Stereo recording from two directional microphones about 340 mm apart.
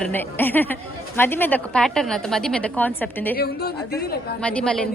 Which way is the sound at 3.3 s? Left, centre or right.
Left.